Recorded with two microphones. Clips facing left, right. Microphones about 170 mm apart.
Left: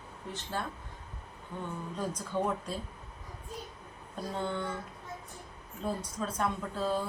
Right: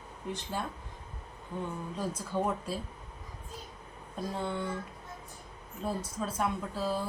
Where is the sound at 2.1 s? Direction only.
5° right (ahead or behind).